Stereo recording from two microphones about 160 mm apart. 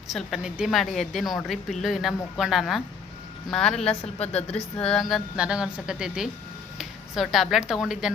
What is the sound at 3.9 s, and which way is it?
Speech, 40° left (ahead or behind).